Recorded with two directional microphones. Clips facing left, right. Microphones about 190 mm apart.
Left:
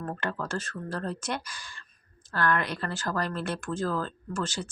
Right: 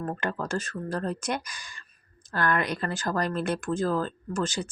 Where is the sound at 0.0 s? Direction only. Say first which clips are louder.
Right 2 dB; 15° right (ahead or behind).